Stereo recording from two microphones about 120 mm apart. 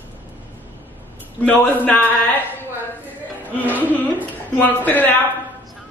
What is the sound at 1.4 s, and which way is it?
A man's voice, 10° left (ahead or behind).